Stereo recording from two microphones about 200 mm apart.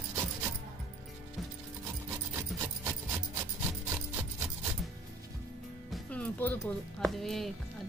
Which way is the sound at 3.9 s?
10° right (ahead or behind).